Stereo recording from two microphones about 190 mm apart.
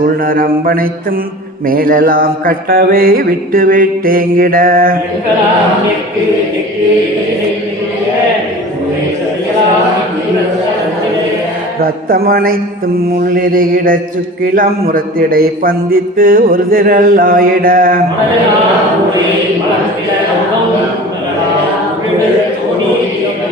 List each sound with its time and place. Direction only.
0.3 s a man's voice: 50° right (ahead or behind)
11.8 s a man's voice: 50° right (ahead or behind)